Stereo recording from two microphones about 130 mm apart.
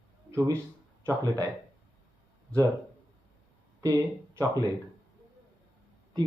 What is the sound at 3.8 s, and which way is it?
Speech, 25° right (ahead or behind).